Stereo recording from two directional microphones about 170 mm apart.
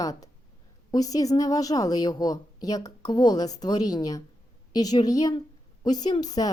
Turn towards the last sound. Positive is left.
turn(degrees=25)  # may be behind; listen again after turning